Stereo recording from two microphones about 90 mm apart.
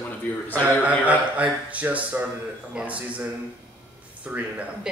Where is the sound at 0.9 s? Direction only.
15° right (ahead or behind).